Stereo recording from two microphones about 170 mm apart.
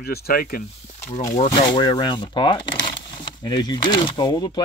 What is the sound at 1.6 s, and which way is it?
Speech, 25° left (ahead or behind).